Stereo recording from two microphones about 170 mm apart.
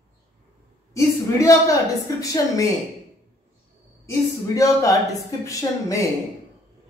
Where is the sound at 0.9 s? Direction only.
20° left (ahead or behind).